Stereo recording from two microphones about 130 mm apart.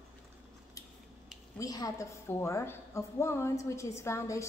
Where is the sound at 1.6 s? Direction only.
30° left (ahead or behind).